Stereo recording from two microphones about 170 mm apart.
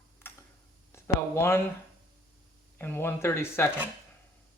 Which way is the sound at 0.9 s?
15° left (ahead or behind).